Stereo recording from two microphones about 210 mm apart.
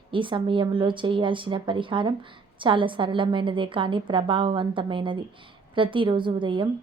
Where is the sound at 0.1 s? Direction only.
25° right (ahead or behind).